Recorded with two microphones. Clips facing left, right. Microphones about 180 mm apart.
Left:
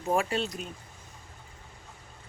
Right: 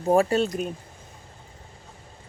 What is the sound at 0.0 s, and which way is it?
Speech, 35° right (ahead or behind).